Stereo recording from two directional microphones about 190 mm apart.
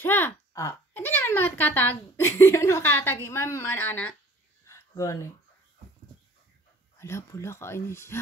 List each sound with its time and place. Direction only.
0.0 s speech: 10° left (ahead or behind)
4.6 s a sound: 15° left (ahead or behind)
7.0 s speech: 15° left (ahead or behind)